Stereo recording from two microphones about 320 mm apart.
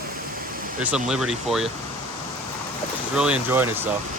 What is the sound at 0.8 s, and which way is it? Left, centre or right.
Speech, centre.